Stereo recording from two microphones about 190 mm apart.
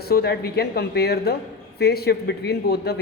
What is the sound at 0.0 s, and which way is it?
Speech, 55° left (ahead or behind).